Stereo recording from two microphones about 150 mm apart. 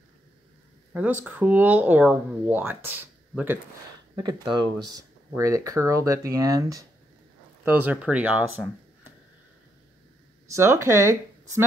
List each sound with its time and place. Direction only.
0.9 s speech: 10° right (ahead or behind)
4.2 s speech: 30° right (ahead or behind)
7.6 s speech: 10° right (ahead or behind)
10.5 s speech: 20° right (ahead or behind)